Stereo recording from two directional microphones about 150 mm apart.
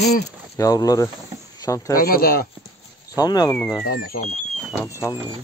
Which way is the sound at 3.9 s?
85° left.